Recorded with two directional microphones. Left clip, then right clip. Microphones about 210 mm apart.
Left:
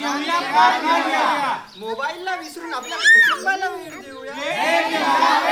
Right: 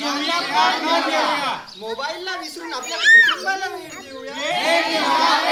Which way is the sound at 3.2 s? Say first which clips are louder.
Right 1 dB; 45° left (ahead or behind).